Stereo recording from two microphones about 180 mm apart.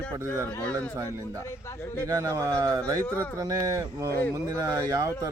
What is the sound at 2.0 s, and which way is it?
Speech, 15° right (ahead or behind).